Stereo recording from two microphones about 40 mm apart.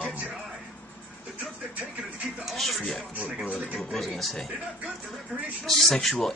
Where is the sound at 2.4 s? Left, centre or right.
Centre.